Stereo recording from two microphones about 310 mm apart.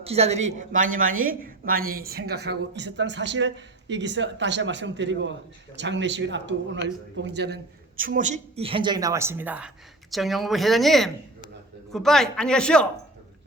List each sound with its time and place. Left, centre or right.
0.0 s a woman's voice: centre